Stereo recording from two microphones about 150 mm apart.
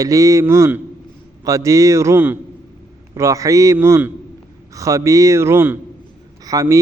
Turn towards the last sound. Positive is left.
turn(degrees=-20)  # may be behind; listen again after turning